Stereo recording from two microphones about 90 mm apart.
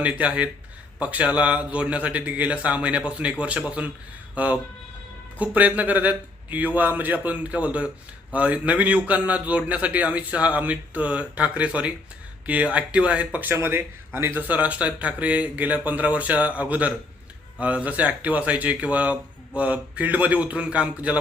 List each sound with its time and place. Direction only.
0.0 s a man's voice: 15° right (ahead or behind)